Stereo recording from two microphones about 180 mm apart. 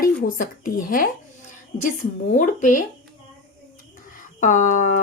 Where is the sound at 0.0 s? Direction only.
55° left (ahead or behind).